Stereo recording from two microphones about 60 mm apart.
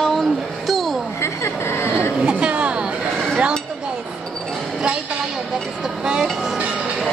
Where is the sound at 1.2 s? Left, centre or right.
Left.